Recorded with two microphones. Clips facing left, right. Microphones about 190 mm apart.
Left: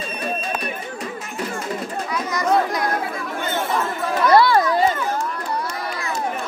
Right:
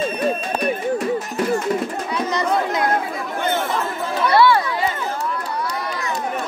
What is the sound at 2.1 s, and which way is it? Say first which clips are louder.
Chatter: left 1 dB; 30° right (ahead or behind).